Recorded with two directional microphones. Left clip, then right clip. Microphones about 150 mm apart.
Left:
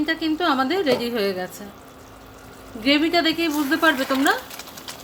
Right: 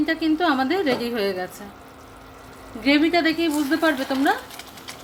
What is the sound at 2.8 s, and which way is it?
Speech, 10° left (ahead or behind).